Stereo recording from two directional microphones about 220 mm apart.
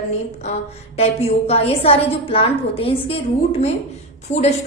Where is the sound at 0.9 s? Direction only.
25° left (ahead or behind).